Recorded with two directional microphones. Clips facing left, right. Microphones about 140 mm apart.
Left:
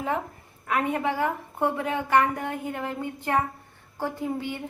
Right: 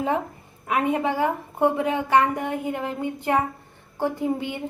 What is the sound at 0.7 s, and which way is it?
A woman's voice, 20° right (ahead or behind).